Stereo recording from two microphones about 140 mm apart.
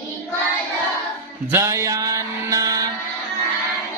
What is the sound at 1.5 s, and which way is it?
Music, 20° right (ahead or behind).